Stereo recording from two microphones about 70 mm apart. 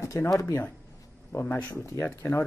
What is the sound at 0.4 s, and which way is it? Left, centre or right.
Speech, left.